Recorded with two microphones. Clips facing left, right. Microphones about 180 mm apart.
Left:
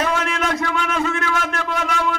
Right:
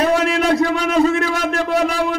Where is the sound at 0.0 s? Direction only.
35° right (ahead or behind).